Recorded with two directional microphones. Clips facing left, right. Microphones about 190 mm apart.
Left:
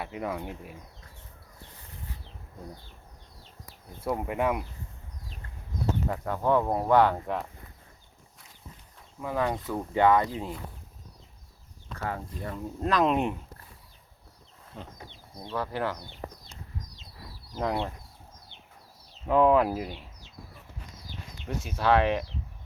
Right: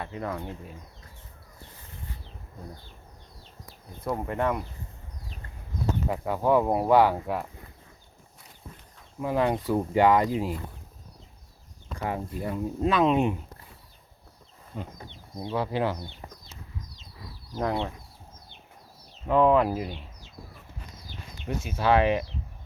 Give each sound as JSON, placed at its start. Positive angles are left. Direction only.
{"t": 0.0, "sound": "speech", "side_deg": 10}
{"t": 4.0, "sound": "speech", "side_deg": 10}
{"t": 6.1, "sound": "speech", "side_deg": -10}
{"t": 9.2, "sound": "speech", "side_deg": -15}
{"t": 11.9, "sound": "speech", "side_deg": -15}
{"t": 14.7, "sound": "speech", "side_deg": -5}
{"t": 17.6, "sound": "speech", "side_deg": 0}
{"t": 19.3, "sound": "speech", "side_deg": 5}
{"t": 21.4, "sound": "speech", "side_deg": 0}